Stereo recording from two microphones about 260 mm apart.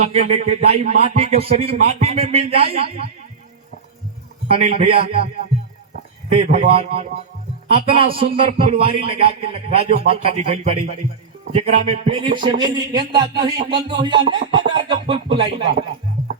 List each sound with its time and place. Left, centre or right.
0.1 s a man's voice: right
4.4 s a man's voice: right
6.3 s a man's voice: right
7.7 s a man's voice: right